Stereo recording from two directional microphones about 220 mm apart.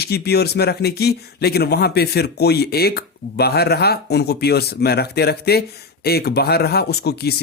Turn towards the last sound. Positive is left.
turn(degrees=45)  # may be behind; listen again after turning